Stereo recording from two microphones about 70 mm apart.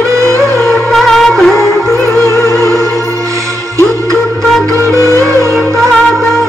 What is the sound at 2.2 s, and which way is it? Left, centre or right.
Music, left.